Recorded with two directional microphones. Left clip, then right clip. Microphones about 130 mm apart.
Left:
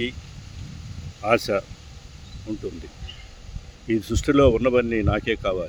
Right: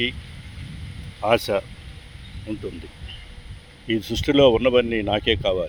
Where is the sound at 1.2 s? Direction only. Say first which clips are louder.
Right 1 dB; 20° left (ahead or behind).